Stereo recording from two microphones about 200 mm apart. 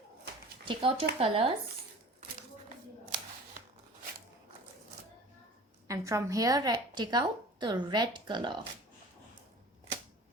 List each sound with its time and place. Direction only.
0.7 s a woman's voice: 25° right (ahead or behind)
5.9 s a woman's voice: 15° right (ahead or behind)